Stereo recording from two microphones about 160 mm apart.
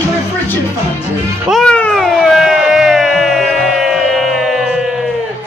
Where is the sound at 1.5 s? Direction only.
5° left (ahead or behind).